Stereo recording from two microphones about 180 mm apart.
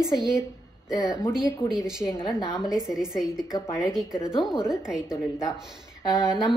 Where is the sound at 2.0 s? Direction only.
15° left (ahead or behind).